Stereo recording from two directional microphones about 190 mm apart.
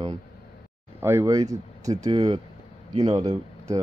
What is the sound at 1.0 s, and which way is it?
Speech, 15° right (ahead or behind).